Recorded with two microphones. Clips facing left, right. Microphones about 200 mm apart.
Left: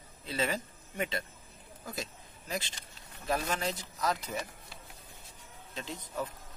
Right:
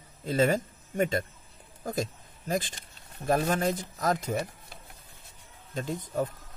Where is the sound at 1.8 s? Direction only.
45° right (ahead or behind).